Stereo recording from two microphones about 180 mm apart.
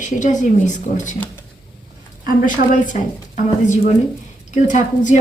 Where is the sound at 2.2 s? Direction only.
45° left (ahead or behind).